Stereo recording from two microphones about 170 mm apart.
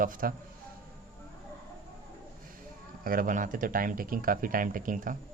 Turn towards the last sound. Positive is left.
turn(degrees=-55)  # may be behind; listen again after turning